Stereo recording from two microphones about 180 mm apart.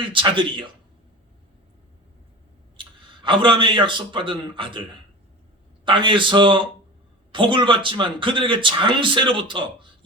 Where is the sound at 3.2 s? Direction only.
25° right (ahead or behind).